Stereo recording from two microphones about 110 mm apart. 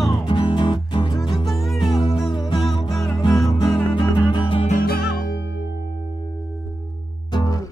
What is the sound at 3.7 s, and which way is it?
Music, 45° left (ahead or behind).